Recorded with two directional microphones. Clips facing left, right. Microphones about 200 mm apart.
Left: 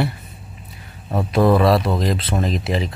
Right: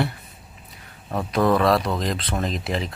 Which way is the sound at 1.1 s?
10° left (ahead or behind).